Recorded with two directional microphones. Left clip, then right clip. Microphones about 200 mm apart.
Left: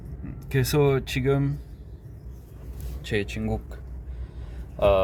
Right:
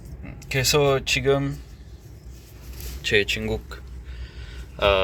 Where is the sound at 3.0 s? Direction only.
10° left (ahead or behind).